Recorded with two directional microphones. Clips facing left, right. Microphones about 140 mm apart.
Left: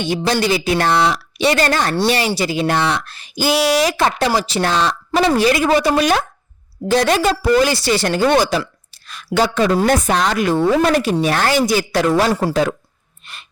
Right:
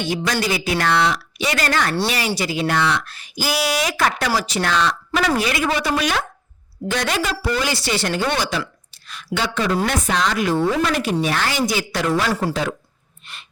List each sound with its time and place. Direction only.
0.0 s a woman's voice: 25° left (ahead or behind); by 12.3 s 40° left (ahead or behind)
12.3 s speech: 30° left (ahead or behind)